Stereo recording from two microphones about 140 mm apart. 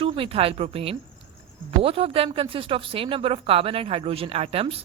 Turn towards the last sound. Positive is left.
turn(degrees=-45)  # may be behind; listen again after turning